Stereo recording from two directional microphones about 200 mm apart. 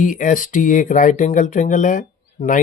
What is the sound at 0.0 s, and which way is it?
Speech, 40° left (ahead or behind).